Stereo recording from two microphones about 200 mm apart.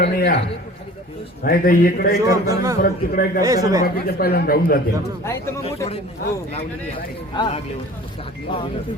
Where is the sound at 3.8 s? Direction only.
50° left (ahead or behind).